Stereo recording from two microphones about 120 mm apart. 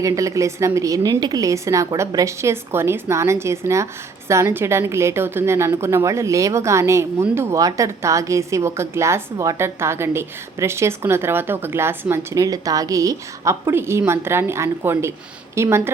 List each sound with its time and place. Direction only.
0.0 s a woman's voice: 25° right (ahead or behind)